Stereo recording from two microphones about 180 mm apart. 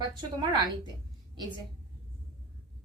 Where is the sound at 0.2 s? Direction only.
25° right (ahead or behind).